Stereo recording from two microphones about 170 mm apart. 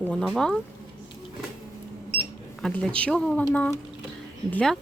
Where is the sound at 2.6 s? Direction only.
Centre (ahead or behind).